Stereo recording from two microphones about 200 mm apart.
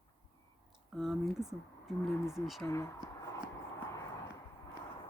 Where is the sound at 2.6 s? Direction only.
15° left (ahead or behind).